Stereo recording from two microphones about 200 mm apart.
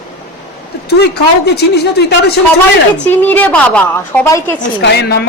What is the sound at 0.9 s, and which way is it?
Speech, 55° left (ahead or behind).